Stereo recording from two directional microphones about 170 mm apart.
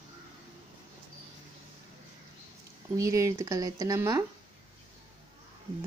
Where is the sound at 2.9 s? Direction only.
20° right (ahead or behind).